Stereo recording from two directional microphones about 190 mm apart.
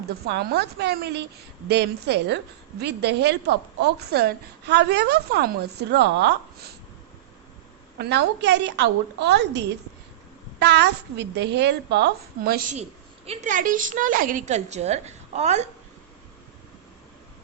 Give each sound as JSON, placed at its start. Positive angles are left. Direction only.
{"t": 0.3, "sound": "a woman's voice", "side_deg": -60}
{"t": 7.9, "sound": "a woman's voice", "side_deg": -60}
{"t": 13.2, "sound": "a woman's voice", "side_deg": -35}